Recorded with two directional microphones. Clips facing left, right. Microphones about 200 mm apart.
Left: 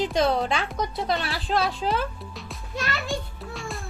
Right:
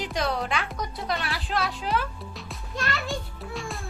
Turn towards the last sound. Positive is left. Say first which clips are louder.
# even
turn(degrees=0)  # may be behind; listen again after turning